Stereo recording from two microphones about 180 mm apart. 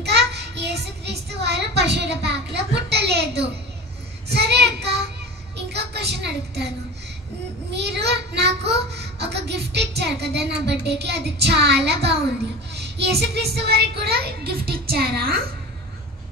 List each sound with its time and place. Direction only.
0.0 s child singing: 70° right (ahead or behind)
5.7 s a sound: 65° right (ahead or behind)
7.7 s a child's voice: 70° right (ahead or behind)